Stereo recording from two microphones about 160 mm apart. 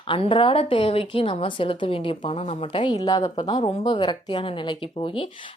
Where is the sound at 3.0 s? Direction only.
20° left (ahead or behind).